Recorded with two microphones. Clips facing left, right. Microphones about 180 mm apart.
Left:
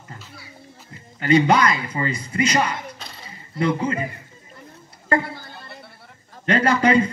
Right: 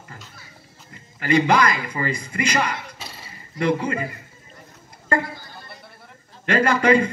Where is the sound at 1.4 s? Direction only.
30° left (ahead or behind).